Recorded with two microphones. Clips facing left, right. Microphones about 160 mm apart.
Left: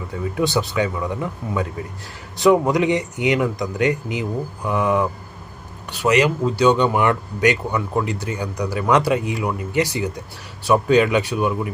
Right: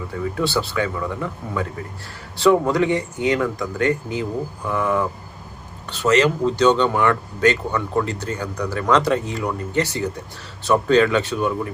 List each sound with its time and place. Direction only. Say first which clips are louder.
0.3 s speech: left 3 dB; 20° left (ahead or behind)